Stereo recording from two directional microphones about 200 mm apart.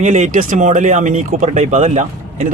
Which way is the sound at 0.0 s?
40° right (ahead or behind).